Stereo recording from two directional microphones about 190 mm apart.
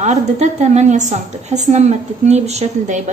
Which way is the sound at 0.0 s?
35° right (ahead or behind).